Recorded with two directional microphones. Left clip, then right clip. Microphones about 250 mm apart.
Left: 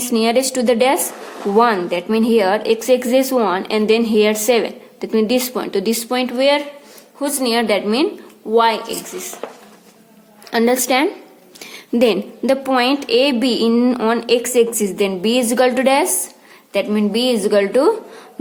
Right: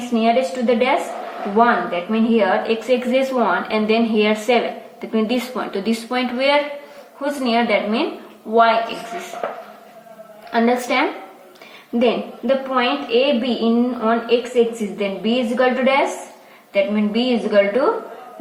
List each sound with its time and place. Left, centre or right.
0.1 s a woman's voice: left
10.5 s a woman's voice: left